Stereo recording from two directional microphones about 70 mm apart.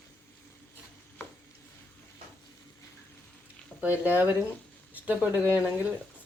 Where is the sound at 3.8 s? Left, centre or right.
Right.